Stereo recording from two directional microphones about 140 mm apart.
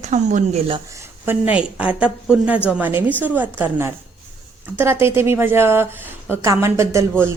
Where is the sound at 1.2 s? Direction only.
10° right (ahead or behind).